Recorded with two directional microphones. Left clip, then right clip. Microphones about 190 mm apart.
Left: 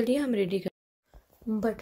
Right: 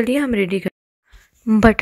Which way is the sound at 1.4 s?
40° right (ahead or behind).